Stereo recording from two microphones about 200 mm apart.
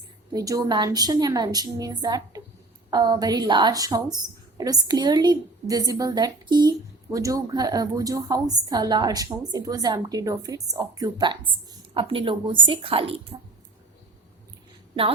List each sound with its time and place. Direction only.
0.3 s a woman's voice: 20° right (ahead or behind)